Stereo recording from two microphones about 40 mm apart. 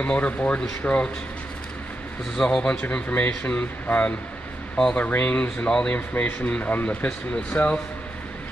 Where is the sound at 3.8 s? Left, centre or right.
Left.